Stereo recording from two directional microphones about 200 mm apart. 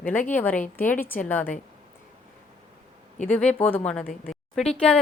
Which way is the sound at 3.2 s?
35° left (ahead or behind).